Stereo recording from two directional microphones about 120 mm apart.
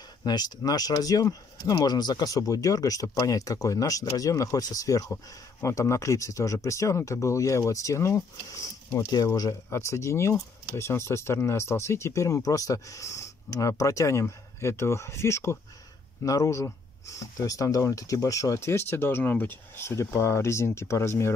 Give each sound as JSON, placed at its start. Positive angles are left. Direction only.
{"t": 0.2, "sound": "speech", "side_deg": 35}